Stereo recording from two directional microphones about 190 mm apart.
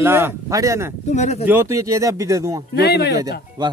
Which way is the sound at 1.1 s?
35° left (ahead or behind).